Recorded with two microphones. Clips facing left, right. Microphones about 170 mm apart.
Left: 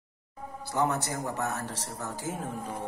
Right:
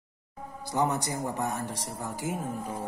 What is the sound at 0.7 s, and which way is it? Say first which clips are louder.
Speech: right 1 dB; 15° right (ahead or behind).